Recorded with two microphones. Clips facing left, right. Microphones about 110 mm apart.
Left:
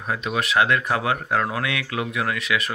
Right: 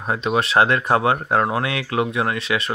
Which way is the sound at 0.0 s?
35° right (ahead or behind).